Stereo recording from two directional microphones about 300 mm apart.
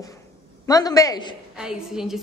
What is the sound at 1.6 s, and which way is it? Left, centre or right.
Speech, centre.